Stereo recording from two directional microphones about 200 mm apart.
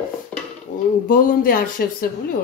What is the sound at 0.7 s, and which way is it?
A woman's voice, 40° left (ahead or behind).